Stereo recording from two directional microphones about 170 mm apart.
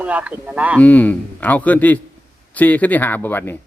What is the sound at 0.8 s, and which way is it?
A man's voice, 10° left (ahead or behind).